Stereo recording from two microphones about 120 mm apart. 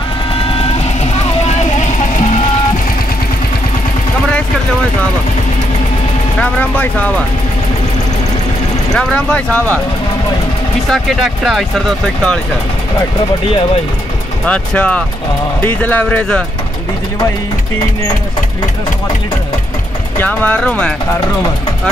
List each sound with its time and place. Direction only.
0.4 s vehicle: 50° left (ahead or behind); by 2.2 s 90° left
6.4 s speech: 10° left (ahead or behind)
8.9 s speech: 10° left (ahead or behind)
10.9 s speech: centre (ahead or behind)
14.4 s speech: 10° left (ahead or behind)
20.2 s speech: 15° left (ahead or behind)